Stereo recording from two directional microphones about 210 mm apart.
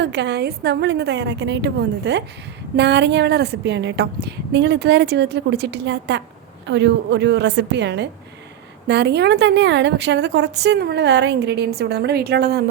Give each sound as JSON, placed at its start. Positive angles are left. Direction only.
{"t": 0.0, "sound": "a woman's voice", "side_deg": -55}